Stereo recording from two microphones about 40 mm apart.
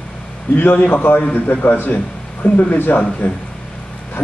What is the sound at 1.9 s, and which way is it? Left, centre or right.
A man's voice, left.